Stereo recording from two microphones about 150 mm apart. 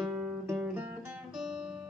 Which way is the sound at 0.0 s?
10° right (ahead or behind).